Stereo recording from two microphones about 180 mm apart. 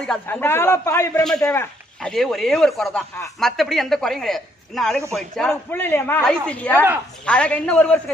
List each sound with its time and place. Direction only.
0.0 s a man's voice: 5° left (ahead or behind)